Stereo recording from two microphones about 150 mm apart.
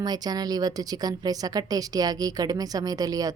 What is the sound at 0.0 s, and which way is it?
A woman's voice, 25° right (ahead or behind).